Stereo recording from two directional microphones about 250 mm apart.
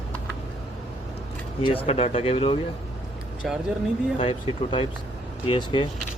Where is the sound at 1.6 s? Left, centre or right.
Left.